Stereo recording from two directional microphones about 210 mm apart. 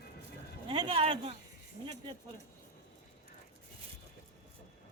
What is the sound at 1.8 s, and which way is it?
Speech, 35° left (ahead or behind).